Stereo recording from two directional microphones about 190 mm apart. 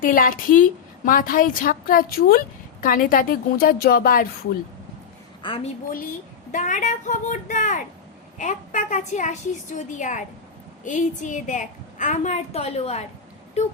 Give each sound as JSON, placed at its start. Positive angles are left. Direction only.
{"t": 0.0, "sound": "a woman's voice", "side_deg": 45}
{"t": 5.4, "sound": "a woman's voice", "side_deg": 25}
{"t": 6.5, "sound": "a woman's voice", "side_deg": 40}